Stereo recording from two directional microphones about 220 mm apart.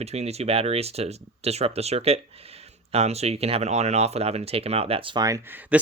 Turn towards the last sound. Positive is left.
turn(degrees=-10)  # may be behind; listen again after turning